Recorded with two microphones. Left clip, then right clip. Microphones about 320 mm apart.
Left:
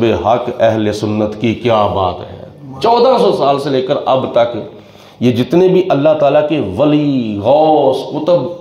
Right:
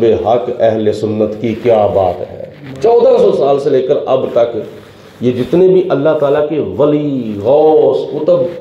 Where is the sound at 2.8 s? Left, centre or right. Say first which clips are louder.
Right 2 dB; left.